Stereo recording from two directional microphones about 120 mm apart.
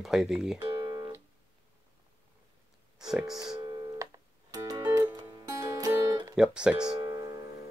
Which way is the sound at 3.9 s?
30° right (ahead or behind).